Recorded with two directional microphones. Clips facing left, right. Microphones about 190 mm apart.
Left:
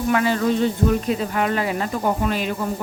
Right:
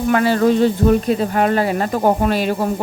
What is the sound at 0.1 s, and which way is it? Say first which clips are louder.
Speech: right 5 dB; 45° right (ahead or behind).